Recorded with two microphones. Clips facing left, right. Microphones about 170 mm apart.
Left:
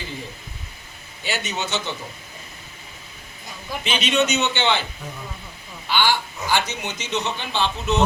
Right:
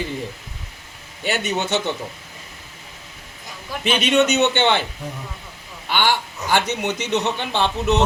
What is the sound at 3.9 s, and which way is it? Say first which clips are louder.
Speech: right 4 dB; 55° right (ahead or behind).